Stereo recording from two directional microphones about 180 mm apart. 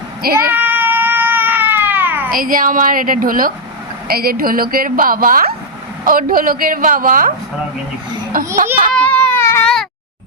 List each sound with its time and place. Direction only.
0.5 s cat: 10° right (ahead or behind)
2.3 s a woman's voice: 50° right (ahead or behind)
8.3 s a woman's voice: 50° right (ahead or behind)
8.9 s baby cry: 5° left (ahead or behind)